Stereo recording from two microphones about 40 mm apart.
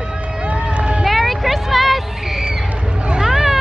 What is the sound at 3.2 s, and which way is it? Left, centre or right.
Vehicle, centre.